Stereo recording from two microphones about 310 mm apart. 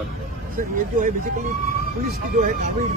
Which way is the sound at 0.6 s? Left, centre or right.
Right.